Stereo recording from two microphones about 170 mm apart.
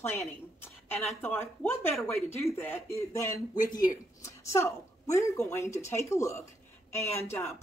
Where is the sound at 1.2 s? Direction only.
15° left (ahead or behind).